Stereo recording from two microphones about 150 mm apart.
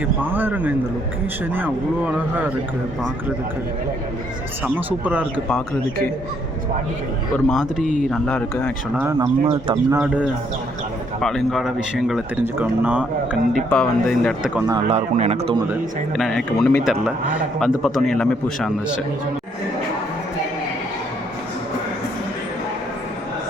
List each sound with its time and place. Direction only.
0.2 s speech: 15° right (ahead or behind)
4.6 s speech: 10° right (ahead or behind)
7.5 s a man's voice: centre (ahead or behind)
8.1 s speech: 10° left (ahead or behind)
9.1 s a man's voice: 25° right (ahead or behind)
11.2 s a man's voice: 5° left (ahead or behind)
13.7 s a man's voice: 5° left (ahead or behind)
14.8 s speech: 45° right (ahead or behind)
16.1 s a man's voice: centre (ahead or behind)